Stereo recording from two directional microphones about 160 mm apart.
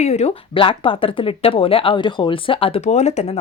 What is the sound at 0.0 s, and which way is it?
Speech, 40° left (ahead or behind).